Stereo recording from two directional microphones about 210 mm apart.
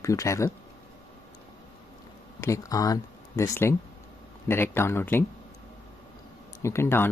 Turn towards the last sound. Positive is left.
turn(degrees=10)  # may be behind; listen again after turning